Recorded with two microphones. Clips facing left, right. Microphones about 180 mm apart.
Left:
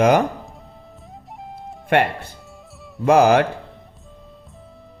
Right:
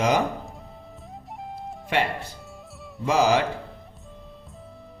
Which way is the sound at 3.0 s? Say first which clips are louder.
Left 7 dB; 60° left (ahead or behind).